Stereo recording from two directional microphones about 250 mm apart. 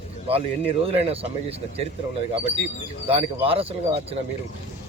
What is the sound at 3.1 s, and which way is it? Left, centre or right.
Speech, right.